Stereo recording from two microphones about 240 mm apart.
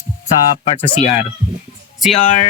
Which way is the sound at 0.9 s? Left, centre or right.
Left.